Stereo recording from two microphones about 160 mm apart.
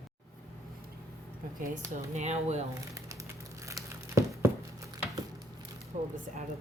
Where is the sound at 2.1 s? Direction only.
45° right (ahead or behind).